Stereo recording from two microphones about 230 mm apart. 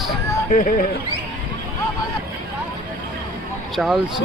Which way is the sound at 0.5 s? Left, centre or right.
Left.